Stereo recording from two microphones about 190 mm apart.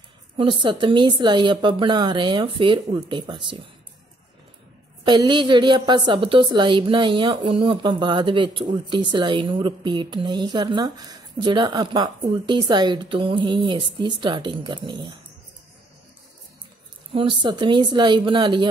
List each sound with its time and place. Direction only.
0.4 s a woman's voice: 25° right (ahead or behind)
5.0 s a woman's voice: 25° right (ahead or behind)
17.1 s a woman's voice: 25° right (ahead or behind)